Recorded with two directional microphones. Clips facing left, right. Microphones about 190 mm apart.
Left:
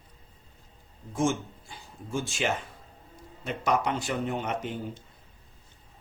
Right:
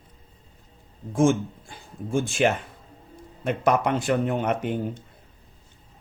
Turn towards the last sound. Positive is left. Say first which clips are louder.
# right 6 dB
turn(degrees=-55)  # may be behind; listen again after turning